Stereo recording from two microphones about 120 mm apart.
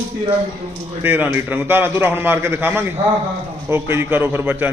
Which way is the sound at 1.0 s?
15° right (ahead or behind).